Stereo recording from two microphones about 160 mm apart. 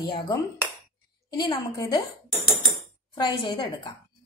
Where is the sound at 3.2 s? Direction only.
30° left (ahead or behind).